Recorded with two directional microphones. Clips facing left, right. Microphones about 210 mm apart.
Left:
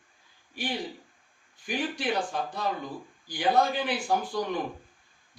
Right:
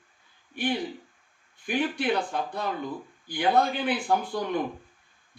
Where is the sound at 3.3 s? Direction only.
55° right (ahead or behind).